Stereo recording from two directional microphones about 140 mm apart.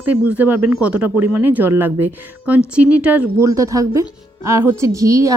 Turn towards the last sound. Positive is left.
turn(degrees=-25)  # may be behind; listen again after turning